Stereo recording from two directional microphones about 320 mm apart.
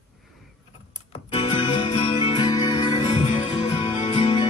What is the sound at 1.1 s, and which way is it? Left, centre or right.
Music, centre.